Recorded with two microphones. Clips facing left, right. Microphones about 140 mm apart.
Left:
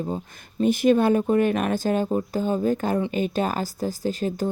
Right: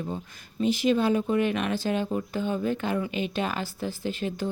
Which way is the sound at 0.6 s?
50° left (ahead or behind).